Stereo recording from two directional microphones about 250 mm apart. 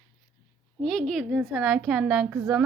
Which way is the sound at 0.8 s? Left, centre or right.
Centre.